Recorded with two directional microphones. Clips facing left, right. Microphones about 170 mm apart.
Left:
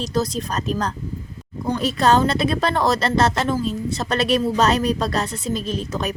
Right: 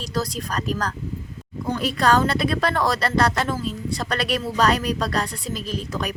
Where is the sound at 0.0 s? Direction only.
20° left (ahead or behind).